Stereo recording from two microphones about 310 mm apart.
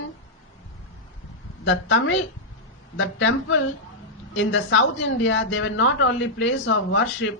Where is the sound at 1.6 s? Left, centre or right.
Left.